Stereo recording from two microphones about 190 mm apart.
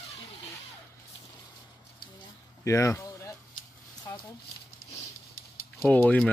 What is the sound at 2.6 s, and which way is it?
Speech, 15° left (ahead or behind).